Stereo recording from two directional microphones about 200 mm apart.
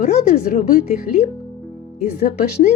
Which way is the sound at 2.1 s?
40° left (ahead or behind).